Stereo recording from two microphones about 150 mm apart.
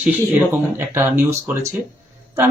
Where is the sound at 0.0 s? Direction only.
10° right (ahead or behind).